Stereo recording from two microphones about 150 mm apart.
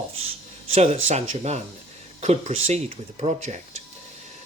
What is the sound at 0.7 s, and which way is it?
Speech, 45° right (ahead or behind).